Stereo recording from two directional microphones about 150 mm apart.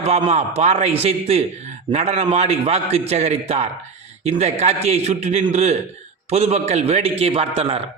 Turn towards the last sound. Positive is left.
turn(degrees=-40)  # may be behind; listen again after turning